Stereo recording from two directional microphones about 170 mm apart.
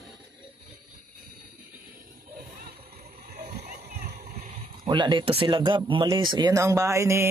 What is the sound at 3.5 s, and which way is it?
Splash, 45° right (ahead or behind).